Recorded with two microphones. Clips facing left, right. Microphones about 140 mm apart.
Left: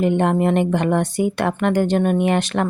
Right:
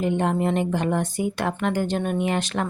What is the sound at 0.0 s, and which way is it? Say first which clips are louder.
A woman's voice: left 5 dB; 65° left (ahead or behind).